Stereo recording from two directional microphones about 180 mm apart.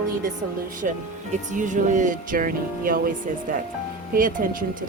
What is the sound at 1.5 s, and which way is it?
Speech, 45° right (ahead or behind).